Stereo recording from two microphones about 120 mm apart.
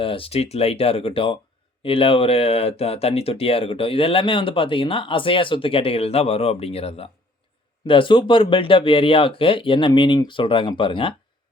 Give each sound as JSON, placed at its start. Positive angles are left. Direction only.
{"t": 0.0, "sound": "speech", "side_deg": 50}
{"t": 7.9, "sound": "speech", "side_deg": 45}